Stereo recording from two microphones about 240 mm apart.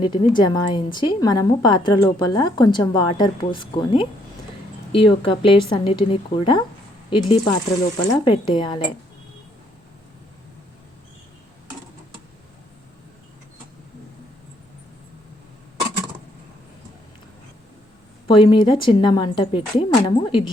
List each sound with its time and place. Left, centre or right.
0.0 s a woman's voice: centre
18.3 s a woman's voice: centre